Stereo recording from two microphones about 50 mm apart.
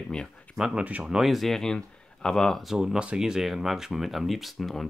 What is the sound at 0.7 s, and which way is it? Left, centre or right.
Speech, right.